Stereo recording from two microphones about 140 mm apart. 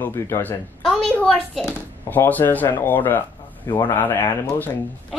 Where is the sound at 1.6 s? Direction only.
15° left (ahead or behind).